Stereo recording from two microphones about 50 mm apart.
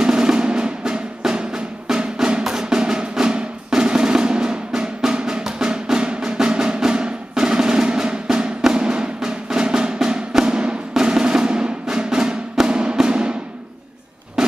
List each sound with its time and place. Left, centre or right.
0.0 s music: centre